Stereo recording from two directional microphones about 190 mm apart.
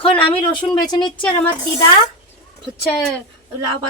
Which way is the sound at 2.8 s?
10° left (ahead or behind).